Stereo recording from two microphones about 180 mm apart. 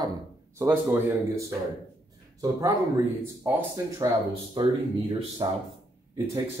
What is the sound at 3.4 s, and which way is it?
A man's voice, 15° right (ahead or behind).